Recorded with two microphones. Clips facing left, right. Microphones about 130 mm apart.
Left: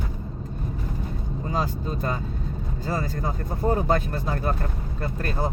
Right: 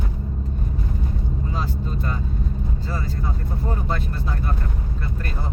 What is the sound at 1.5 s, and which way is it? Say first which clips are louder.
Vehicle: left 5 dB; 45° left (ahead or behind).